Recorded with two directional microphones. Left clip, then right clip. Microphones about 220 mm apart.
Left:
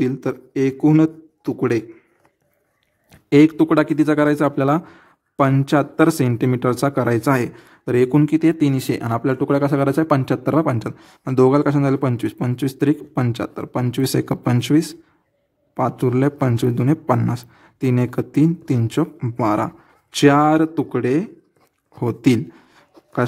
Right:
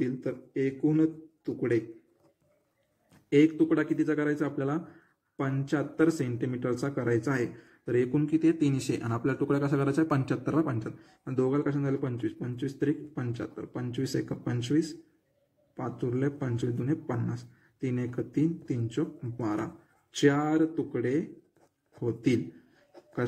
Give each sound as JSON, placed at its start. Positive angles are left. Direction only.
{"t": 0.0, "sound": "a man's voice", "side_deg": 50}
{"t": 3.3, "sound": "speech", "side_deg": 45}